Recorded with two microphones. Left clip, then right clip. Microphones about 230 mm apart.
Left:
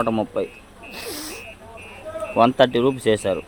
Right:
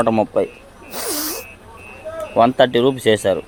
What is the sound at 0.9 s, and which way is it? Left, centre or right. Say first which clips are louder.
Sneeze: right 7 dB; centre.